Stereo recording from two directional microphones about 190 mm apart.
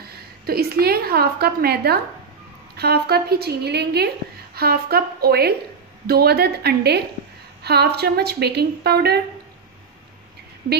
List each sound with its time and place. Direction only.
0.0 s a woman's voice: 55° right (ahead or behind)